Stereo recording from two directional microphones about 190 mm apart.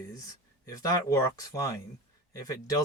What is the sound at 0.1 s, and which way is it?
Speech, 20° left (ahead or behind).